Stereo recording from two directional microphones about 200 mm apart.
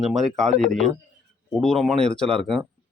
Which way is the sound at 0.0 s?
Centre (ahead or behind).